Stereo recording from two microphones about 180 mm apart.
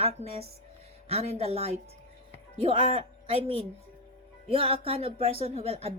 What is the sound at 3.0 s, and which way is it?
A woman's voice, 30° right (ahead or behind).